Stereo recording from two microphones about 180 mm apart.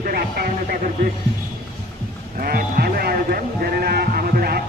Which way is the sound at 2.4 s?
55° right (ahead or behind).